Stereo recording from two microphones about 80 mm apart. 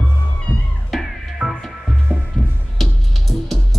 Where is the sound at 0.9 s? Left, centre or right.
Centre.